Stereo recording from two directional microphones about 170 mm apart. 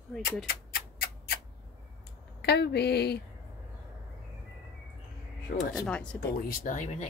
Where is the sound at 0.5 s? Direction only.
65° left (ahead or behind).